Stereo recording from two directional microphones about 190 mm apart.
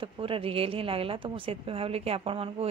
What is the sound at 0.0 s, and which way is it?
Speech, 30° right (ahead or behind).